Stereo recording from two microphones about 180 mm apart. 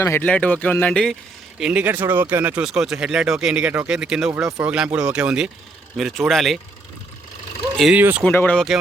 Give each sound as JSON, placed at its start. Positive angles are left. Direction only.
{"t": 0.0, "sound": "speech", "side_deg": 10}
{"t": 1.5, "sound": "speech", "side_deg": -5}
{"t": 4.4, "sound": "speech", "side_deg": -20}
{"t": 4.7, "sound": "speech", "side_deg": -5}
{"t": 7.8, "sound": "speech", "side_deg": -5}
{"t": 8.2, "sound": "speech", "side_deg": 10}